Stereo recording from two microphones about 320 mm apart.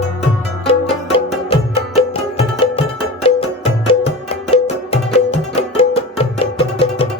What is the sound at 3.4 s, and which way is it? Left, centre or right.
Music, centre.